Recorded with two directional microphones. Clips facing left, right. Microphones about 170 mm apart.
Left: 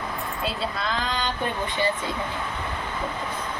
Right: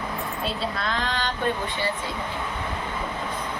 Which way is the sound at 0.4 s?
Centre (ahead or behind).